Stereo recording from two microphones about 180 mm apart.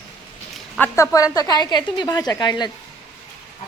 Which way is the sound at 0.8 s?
10° left (ahead or behind).